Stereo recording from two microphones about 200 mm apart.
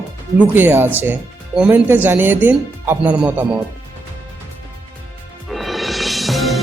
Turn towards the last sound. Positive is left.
turn(degrees=0)  # may be behind; listen again after turning